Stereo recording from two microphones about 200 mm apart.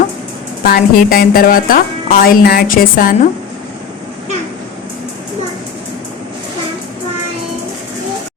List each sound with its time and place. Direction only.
0.6 s a woman's voice: 50° left (ahead or behind)